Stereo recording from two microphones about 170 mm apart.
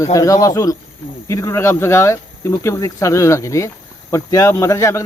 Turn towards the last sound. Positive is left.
turn(degrees=15)  # may be behind; listen again after turning